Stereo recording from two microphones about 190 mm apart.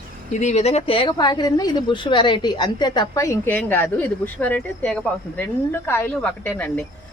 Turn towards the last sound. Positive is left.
turn(degrees=10)  # may be behind; listen again after turning